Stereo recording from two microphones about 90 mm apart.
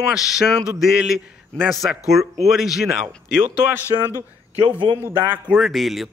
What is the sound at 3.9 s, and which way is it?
Speech, 50° right (ahead or behind).